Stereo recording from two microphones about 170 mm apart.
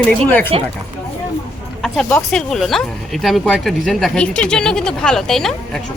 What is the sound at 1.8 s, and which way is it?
Speech, 5° left (ahead or behind).